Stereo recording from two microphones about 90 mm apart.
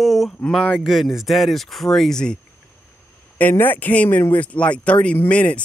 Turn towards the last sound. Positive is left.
turn(degrees=15)  # may be behind; listen again after turning